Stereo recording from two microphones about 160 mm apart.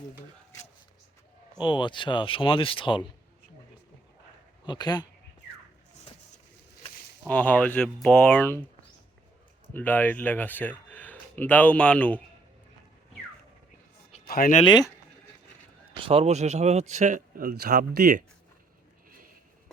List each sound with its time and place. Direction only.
1.5 s speech: 30° left (ahead or behind)
4.6 s speech: 25° left (ahead or behind)
7.3 s speech: 10° left (ahead or behind)
9.7 s speech: 10° left (ahead or behind)
14.3 s speech: 70° left (ahead or behind)
14.6 s speech: 25° left (ahead or behind)
16.0 s speech: 35° right (ahead or behind); by 18.2 s 70° right (ahead or behind)